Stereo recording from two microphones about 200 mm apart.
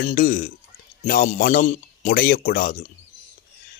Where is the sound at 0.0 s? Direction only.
45° left (ahead or behind).